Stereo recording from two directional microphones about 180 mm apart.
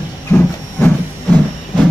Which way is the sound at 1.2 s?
5° right (ahead or behind).